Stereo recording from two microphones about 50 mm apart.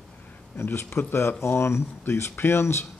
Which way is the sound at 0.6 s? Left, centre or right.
Left.